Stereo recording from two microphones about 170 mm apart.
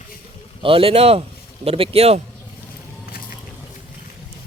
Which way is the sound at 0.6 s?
30° right (ahead or behind).